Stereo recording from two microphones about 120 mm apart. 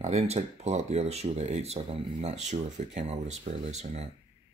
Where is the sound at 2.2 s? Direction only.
70° right (ahead or behind).